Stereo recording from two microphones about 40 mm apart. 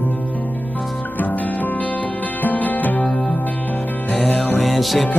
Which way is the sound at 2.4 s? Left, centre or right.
Left.